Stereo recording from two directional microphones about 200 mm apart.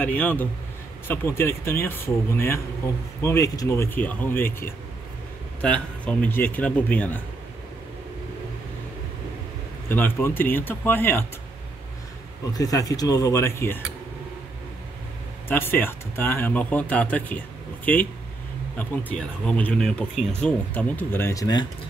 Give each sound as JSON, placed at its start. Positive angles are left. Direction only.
{"t": 0.0, "sound": "speech", "side_deg": 5}
{"t": 9.8, "sound": "speech", "side_deg": 10}
{"t": 12.5, "sound": "speech", "side_deg": 15}
{"t": 15.4, "sound": "speech", "side_deg": 10}
{"t": 18.8, "sound": "speech", "side_deg": 5}